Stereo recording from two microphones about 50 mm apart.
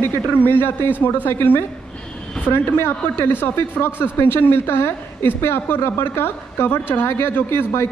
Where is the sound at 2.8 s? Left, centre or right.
Left.